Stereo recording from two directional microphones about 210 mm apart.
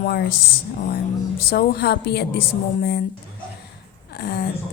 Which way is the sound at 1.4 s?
50° left (ahead or behind).